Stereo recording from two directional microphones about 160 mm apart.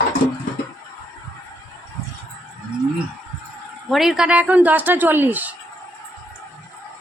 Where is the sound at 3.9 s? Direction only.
Centre (ahead or behind).